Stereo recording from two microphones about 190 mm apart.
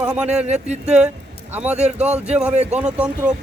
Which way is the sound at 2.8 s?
5° right (ahead or behind).